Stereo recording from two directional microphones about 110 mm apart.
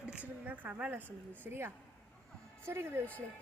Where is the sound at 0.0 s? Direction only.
10° right (ahead or behind).